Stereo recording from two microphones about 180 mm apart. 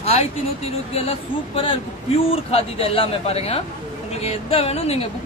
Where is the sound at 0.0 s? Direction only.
35° left (ahead or behind).